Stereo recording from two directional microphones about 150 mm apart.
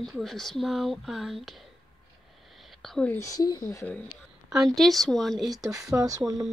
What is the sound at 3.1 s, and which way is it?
Speech, 20° left (ahead or behind).